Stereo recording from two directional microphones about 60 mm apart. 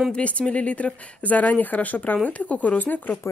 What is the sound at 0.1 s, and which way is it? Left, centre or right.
Speech, left.